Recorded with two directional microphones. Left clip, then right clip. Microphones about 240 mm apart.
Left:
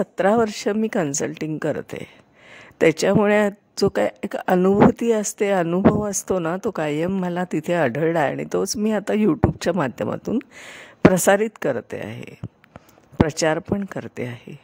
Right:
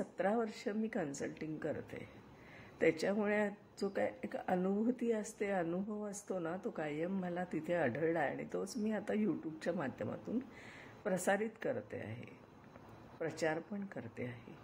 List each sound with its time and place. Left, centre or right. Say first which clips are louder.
0.0 s speech: left 18 dB; left